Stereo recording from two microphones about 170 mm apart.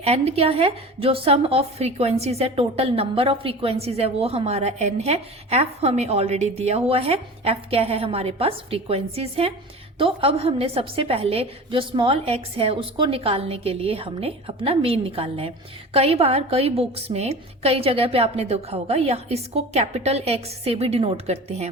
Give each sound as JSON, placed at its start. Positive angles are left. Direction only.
{"t": 0.0, "sound": "a woman's voice", "side_deg": -35}